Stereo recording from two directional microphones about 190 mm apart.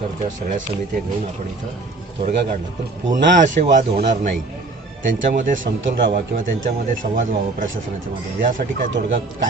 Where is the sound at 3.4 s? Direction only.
40° right (ahead or behind).